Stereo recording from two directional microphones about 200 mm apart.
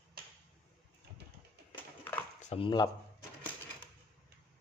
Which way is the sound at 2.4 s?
30° left (ahead or behind).